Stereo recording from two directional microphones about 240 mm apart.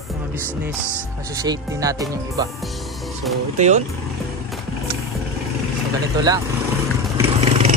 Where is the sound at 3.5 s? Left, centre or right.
Right.